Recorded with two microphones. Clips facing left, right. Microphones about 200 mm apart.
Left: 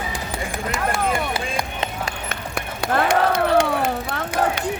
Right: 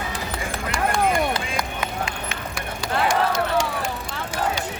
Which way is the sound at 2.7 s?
60° left (ahead or behind).